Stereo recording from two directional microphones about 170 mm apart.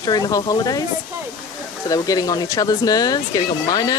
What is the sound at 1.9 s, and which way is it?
Speech, 20° left (ahead or behind).